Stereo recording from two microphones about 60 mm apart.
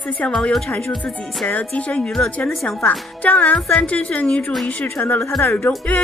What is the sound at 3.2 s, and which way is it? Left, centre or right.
Speech, left.